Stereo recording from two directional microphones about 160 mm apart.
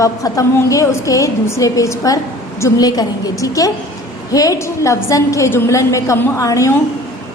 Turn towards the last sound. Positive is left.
turn(degrees=20)  # may be behind; listen again after turning